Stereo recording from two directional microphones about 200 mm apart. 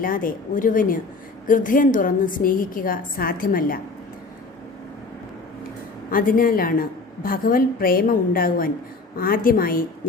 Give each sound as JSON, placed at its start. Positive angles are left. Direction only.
{"t": 0.0, "sound": "a woman's voice", "side_deg": 45}
{"t": 6.1, "sound": "a woman's voice", "side_deg": 45}